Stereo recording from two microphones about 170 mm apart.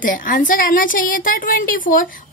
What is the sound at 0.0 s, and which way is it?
A woman's voice, 55° left (ahead or behind).